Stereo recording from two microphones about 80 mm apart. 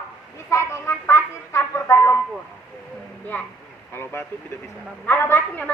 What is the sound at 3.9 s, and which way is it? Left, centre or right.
A woman's voice, left.